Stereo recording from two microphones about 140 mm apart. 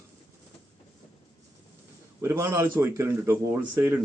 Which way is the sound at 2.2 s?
20° right (ahead or behind).